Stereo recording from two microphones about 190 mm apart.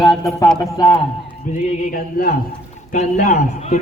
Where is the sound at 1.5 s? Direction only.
50° left (ahead or behind).